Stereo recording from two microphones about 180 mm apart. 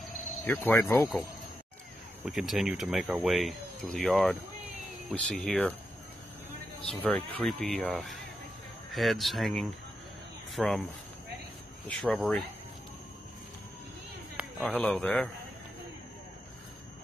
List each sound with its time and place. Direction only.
0.5 s speech: 10° left (ahead or behind)
2.2 s speech: centre (ahead or behind)
7.1 s speech: 5° left (ahead or behind)
11.9 s speech: 5° left (ahead or behind)
14.6 s speech: 5° left (ahead or behind)